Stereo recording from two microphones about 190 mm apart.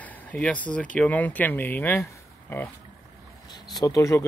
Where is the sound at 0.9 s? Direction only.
10° left (ahead or behind).